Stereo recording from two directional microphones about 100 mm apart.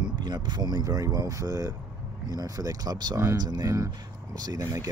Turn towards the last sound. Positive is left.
turn(degrees=-35)  # may be behind; listen again after turning